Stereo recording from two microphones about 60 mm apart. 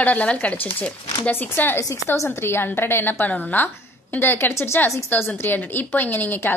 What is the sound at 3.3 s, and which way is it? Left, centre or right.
A woman's voice, left.